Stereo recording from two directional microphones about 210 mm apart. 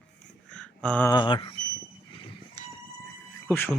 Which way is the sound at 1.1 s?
20° left (ahead or behind).